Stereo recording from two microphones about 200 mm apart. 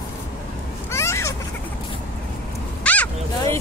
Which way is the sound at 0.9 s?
15° left (ahead or behind).